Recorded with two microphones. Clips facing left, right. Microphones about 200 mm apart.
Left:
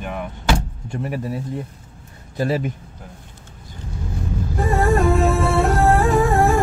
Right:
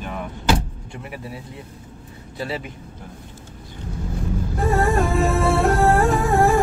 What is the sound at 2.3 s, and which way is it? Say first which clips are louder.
Speech: left 7 dB; 45° left (ahead or behind).